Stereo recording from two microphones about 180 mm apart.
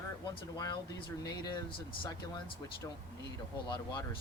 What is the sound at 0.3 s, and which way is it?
Speech, 25° left (ahead or behind).